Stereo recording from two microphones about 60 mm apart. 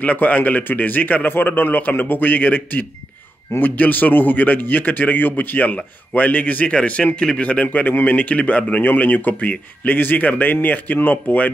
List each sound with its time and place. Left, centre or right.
0.0 s a man's voice: left